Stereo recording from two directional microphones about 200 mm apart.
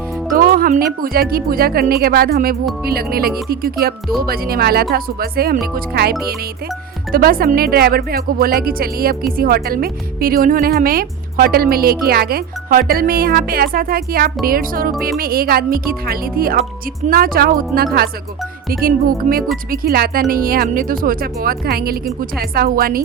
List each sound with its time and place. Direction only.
0.3 s speech: 45° right (ahead or behind)